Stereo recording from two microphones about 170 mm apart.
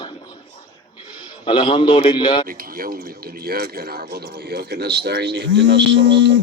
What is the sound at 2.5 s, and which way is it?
Speech, 55° right (ahead or behind).